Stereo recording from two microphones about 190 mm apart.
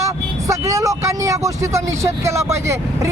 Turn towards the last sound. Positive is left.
turn(degrees=-15)  # may be behind; listen again after turning